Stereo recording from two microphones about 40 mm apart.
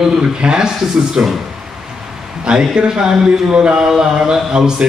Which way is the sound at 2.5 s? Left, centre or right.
Right.